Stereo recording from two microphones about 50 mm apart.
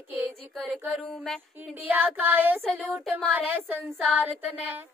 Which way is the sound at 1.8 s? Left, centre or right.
Right.